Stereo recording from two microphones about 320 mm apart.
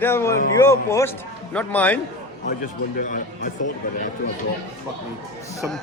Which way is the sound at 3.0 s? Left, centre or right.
Left.